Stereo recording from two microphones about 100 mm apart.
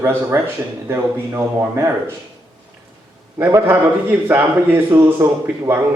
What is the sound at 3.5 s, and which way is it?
A man's voice, 25° right (ahead or behind).